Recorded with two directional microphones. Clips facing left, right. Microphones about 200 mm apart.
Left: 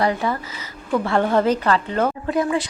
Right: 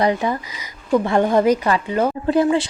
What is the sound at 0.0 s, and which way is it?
Speech, 20° right (ahead or behind).